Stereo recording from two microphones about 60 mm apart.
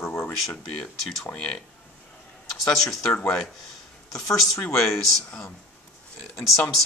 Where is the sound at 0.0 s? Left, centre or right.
Left.